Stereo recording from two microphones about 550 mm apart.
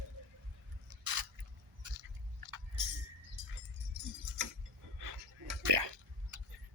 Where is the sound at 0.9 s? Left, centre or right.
Right.